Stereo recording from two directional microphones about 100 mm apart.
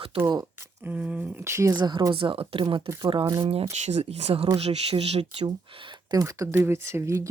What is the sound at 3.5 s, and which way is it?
Speech, 85° right.